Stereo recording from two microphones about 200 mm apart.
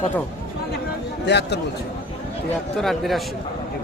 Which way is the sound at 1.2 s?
55° left (ahead or behind).